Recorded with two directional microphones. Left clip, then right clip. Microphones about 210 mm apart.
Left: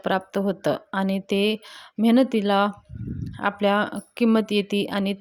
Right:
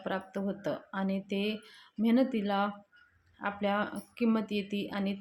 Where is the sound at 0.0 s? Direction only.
45° left (ahead or behind).